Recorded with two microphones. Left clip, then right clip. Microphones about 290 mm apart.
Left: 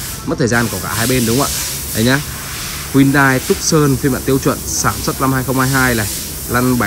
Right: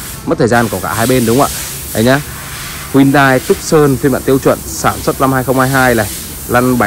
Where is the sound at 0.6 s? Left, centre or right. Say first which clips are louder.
Right 5 dB; right.